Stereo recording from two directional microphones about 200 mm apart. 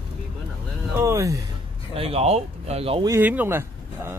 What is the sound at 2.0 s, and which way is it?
Speech, 30° right (ahead or behind).